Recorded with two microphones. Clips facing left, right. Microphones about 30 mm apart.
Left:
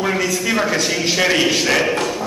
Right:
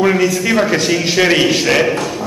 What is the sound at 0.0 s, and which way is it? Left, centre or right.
A man's voice, centre.